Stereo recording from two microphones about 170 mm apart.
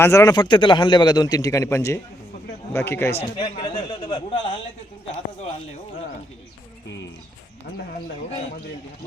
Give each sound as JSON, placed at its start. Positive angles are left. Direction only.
{"t": 0.0, "sound": "a man's voice", "side_deg": 15}
{"t": 3.2, "sound": "a man's voice", "side_deg": 25}